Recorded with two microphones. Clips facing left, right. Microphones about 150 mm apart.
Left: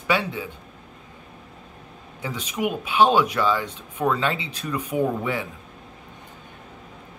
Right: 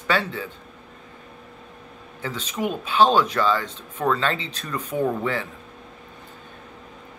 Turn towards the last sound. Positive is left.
turn(degrees=15)  # may be behind; listen again after turning